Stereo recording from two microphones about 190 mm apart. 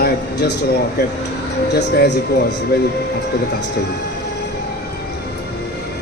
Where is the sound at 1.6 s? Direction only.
60° left (ahead or behind).